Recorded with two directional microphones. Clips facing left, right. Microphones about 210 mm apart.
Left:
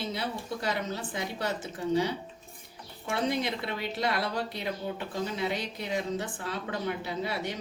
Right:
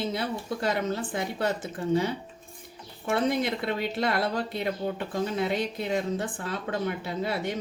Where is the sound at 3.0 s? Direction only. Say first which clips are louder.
Right 4 dB; 55° right (ahead or behind).